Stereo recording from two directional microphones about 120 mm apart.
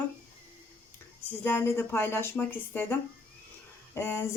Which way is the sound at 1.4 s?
20° left (ahead or behind).